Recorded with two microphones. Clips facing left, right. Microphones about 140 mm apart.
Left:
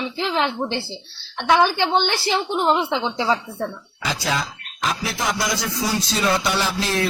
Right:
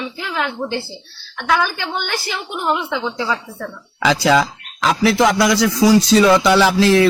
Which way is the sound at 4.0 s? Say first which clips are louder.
Right 10 dB; 90° right.